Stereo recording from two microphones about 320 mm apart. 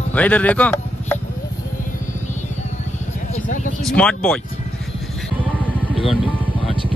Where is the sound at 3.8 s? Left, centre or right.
Centre.